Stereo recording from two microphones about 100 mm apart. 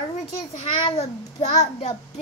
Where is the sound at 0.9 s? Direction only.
90° left.